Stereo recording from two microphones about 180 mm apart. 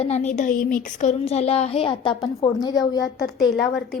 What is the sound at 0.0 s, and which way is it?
A woman's voice, 40° left (ahead or behind).